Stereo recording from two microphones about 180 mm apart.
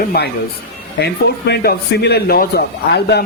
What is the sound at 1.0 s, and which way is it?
Speech, 65° left (ahead or behind).